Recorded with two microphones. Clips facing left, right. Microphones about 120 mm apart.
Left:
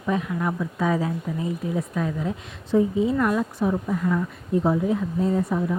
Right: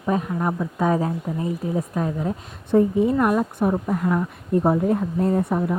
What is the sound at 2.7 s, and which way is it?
Speech, 55° right (ahead or behind).